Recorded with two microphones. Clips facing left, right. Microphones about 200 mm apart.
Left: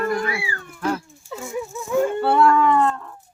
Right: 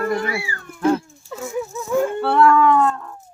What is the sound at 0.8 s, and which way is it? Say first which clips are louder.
Dog: right 6 dB; 25° right (ahead or behind).